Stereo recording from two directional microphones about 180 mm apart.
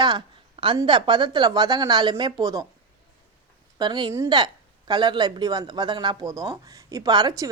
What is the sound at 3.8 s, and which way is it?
Speech, 25° right (ahead or behind).